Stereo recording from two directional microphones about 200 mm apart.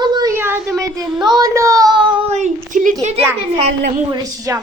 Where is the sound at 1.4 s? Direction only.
15° right (ahead or behind); by 2.9 s 40° right (ahead or behind).